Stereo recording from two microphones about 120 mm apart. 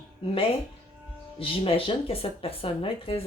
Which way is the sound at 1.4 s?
50° left (ahead or behind).